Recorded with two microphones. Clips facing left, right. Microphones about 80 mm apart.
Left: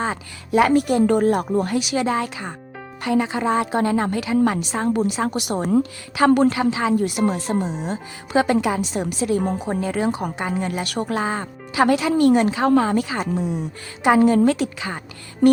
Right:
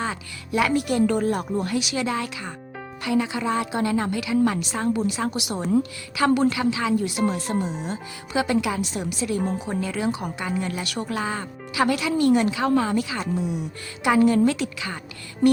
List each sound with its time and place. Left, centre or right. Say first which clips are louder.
0.0 s a woman's voice: left 4 dB; left
7.5 s speech: left 3 dB; left
8.3 s a woman's voice: left 4 dB; left